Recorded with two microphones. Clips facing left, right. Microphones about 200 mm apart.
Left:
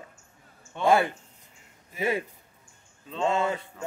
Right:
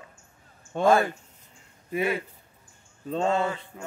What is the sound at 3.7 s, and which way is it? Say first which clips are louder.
Speech: left 3 dB; 20° right (ahead or behind).